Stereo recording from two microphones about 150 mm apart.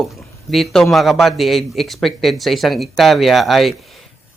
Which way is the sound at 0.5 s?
Centre (ahead or behind).